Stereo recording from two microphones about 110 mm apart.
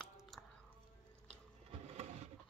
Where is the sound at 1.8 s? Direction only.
75° right (ahead or behind).